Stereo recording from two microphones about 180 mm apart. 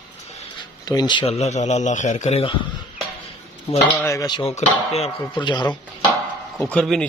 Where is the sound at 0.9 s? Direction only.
25° left (ahead or behind).